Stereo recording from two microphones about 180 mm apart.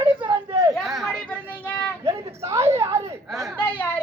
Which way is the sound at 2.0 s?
15° right (ahead or behind).